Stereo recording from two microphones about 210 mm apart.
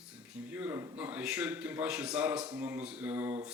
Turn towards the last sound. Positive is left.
turn(degrees=-10)  # may be behind; listen again after turning